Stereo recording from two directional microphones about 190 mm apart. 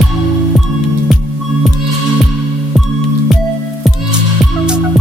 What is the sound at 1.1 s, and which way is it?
Music, centre (ahead or behind).